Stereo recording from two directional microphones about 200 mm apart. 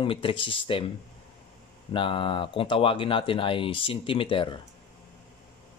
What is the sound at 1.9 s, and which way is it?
Speech, 25° left (ahead or behind).